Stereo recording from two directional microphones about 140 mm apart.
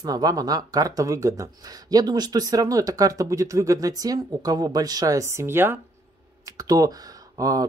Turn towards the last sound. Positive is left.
turn(degrees=-25)  # may be behind; listen again after turning